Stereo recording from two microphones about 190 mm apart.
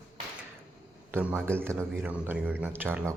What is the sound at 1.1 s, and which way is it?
A man's voice, 10° right (ahead or behind).